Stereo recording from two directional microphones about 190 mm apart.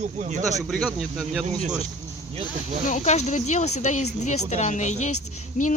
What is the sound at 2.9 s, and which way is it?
A woman's voice, 35° left (ahead or behind).